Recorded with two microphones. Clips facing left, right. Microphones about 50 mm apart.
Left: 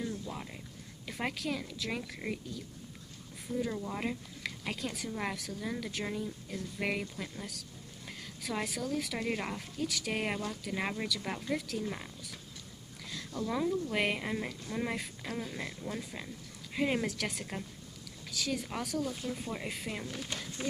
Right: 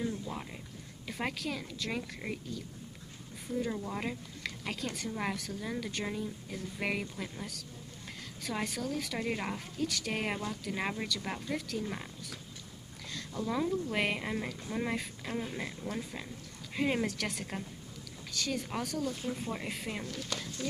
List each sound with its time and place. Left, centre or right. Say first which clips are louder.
0.0 s a sound: right 2 dB; centre
1.0 s speech: even; centre
13.5 s speech: even; centre
20.1 s speech: right 1 dB; left